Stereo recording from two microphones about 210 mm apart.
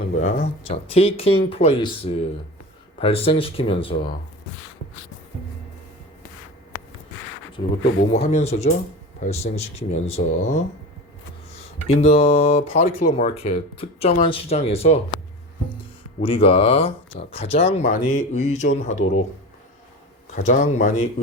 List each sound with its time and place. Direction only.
0.2 s speech: 35° left (ahead or behind)
7.6 s speech: 25° left (ahead or behind)
11.9 s speech: 30° left (ahead or behind)
16.2 s speech: 25° left (ahead or behind)
20.3 s speech: 35° left (ahead or behind)